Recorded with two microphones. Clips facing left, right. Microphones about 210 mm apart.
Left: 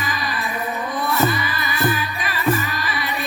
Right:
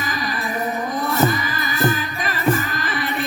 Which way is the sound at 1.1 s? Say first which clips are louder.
Right 1 dB; 45° right (ahead or behind).